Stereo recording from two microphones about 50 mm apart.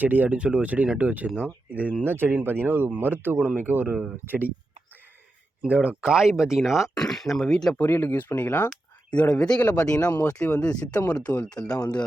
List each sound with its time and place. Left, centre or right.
0.0 s speech: right
0.3 s speech: right
2.0 s speech: right
5.6 s speech: right
6.1 s speech: centre
6.9 s speech: centre
7.9 s speech: left
9.3 s speech: centre
9.6 s speech: left
9.8 s speech: left